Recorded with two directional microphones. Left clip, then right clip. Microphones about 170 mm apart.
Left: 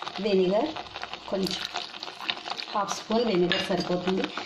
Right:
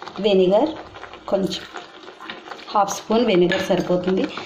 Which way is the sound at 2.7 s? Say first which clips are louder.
Right 11 dB; 20° right (ahead or behind).